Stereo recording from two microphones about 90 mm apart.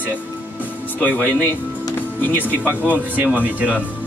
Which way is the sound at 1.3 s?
20° left (ahead or behind).